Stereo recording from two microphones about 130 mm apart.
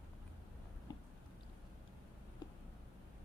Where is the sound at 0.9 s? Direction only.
35° left (ahead or behind).